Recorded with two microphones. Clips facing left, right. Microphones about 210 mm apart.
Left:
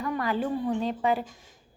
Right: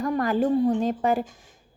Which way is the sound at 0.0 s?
45° right (ahead or behind).